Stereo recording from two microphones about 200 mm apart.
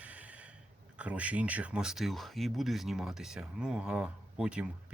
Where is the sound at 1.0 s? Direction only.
5° right (ahead or behind).